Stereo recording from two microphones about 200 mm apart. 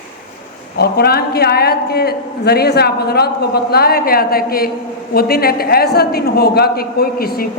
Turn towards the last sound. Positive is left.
turn(degrees=50)  # may be behind; listen again after turning